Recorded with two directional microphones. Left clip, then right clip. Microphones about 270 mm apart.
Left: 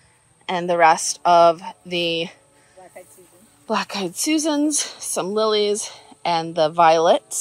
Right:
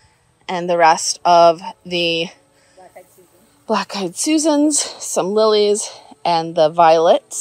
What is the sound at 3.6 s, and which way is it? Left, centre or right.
Speech, centre.